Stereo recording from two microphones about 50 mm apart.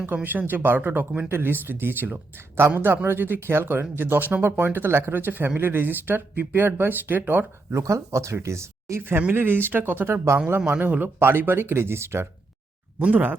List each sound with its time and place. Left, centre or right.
0.0 s speech: right
1.3 s speech: right
7.7 s speech: right
9.0 s speech: right
10.7 s speech: right
11.2 s speech: right
13.0 s speech: right